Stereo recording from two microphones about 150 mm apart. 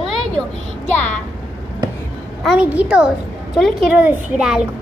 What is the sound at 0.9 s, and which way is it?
Speech, 10° left (ahead or behind).